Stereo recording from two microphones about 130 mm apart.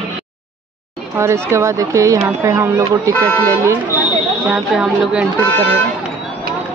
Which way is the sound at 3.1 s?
15° left (ahead or behind).